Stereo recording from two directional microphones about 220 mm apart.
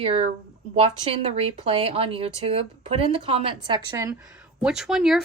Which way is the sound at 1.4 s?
25° right (ahead or behind).